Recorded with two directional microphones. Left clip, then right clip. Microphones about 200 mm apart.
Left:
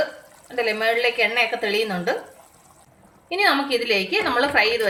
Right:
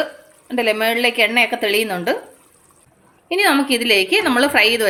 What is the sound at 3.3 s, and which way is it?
A woman's voice, 55° right (ahead or behind).